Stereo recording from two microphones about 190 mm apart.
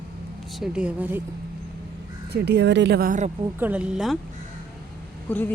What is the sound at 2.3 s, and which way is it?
Speech, 65° right (ahead or behind).